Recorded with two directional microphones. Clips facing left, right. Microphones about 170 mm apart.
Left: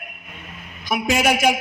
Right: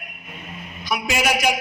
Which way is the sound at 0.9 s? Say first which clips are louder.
Left 3 dB; 50° left (ahead or behind).